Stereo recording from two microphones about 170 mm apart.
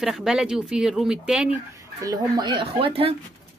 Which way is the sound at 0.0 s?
5° right (ahead or behind).